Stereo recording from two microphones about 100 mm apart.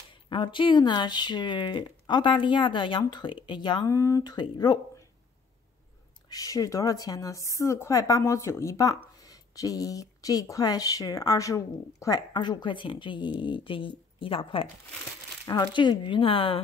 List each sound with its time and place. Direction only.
0.3 s speech: 55° left (ahead or behind)
3.8 s speech: 30° left (ahead or behind)
4.2 s speech: 40° left (ahead or behind)
6.3 s speech: 35° left (ahead or behind); by 14.7 s 65° left (ahead or behind)
15.4 s speech: 50° left (ahead or behind)